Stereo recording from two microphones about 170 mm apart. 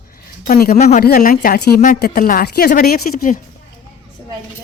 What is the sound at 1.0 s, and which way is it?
A woman's voice, 55° left (ahead or behind).